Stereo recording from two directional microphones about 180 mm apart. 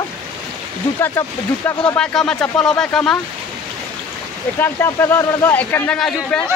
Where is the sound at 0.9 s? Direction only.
15° left (ahead or behind).